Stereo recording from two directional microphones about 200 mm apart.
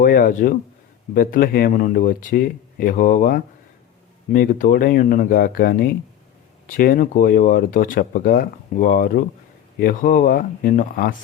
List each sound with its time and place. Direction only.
0.0 s speech: 45° left (ahead or behind)